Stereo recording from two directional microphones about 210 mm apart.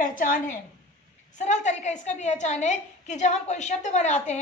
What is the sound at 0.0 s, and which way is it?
A woman's voice, 40° left (ahead or behind).